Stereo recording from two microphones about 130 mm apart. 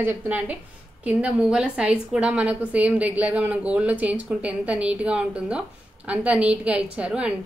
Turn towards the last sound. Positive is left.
turn(degrees=-10)  # may be behind; listen again after turning